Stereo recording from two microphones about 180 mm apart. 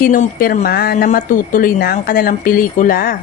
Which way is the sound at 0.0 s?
50° left (ahead or behind).